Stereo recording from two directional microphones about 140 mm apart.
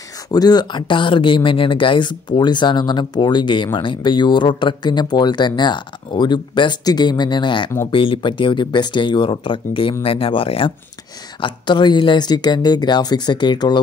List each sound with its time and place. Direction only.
0.3 s speech: 30° left (ahead or behind)